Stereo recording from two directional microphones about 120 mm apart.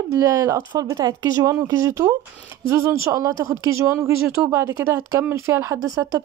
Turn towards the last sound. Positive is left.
turn(degrees=-30)  # may be behind; listen again after turning